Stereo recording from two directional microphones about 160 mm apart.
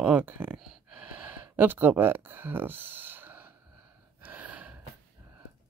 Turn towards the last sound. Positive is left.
turn(degrees=-10)  # may be behind; listen again after turning